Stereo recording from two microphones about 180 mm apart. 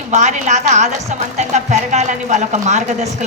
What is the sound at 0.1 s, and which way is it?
Speech, 40° right (ahead or behind).